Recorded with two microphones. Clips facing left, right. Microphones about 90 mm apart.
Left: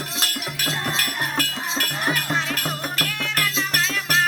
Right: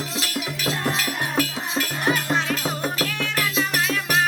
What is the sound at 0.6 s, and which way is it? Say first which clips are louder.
Music: right 2 dB; 20° right (ahead or behind).